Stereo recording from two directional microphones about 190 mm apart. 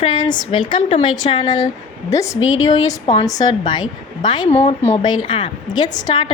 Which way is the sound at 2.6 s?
20° left (ahead or behind).